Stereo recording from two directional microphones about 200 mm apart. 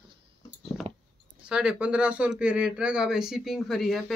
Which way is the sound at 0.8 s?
30° right (ahead or behind).